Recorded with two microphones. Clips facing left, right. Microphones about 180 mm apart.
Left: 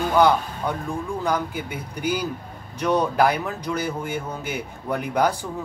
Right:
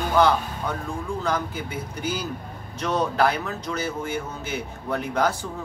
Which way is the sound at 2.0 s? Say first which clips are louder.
Left 5 dB; 15° left (ahead or behind).